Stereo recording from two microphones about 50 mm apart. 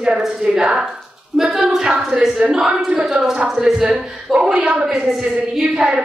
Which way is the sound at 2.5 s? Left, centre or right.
Centre.